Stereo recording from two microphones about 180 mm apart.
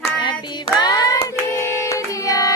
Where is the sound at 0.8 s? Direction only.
20° left (ahead or behind).